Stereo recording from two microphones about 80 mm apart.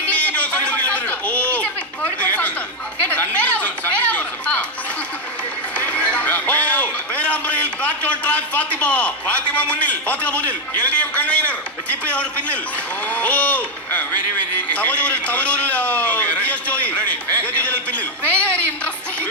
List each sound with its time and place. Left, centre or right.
0.0 s a sound: centre
3.1 s chatter: centre
5.7 s music: centre
8.8 s a man's voice: centre